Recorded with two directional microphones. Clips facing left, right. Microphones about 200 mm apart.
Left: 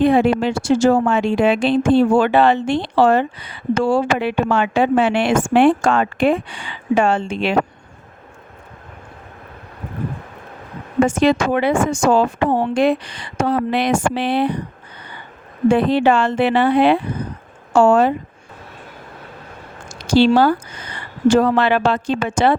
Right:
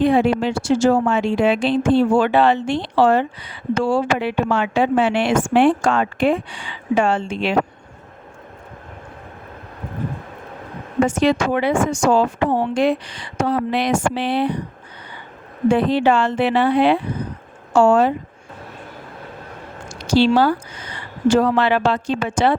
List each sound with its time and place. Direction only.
0.0 s a woman's voice: 55° left (ahead or behind)
11.0 s a woman's voice: 50° left (ahead or behind)
15.7 s a woman's voice: 55° left (ahead or behind)
19.9 s speech: 50° left (ahead or behind)